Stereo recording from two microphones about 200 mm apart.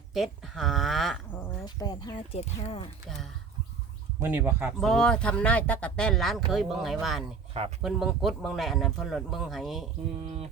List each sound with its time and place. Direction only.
0.1 s speech: centre (ahead or behind)
1.4 s speech: 20° left (ahead or behind)
4.2 s speech: 10° right (ahead or behind)
4.8 s speech: centre (ahead or behind)
10.2 s mantra: 30° right (ahead or behind)